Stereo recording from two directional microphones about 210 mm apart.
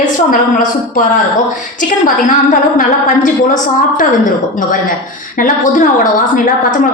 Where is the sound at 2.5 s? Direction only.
40° left (ahead or behind).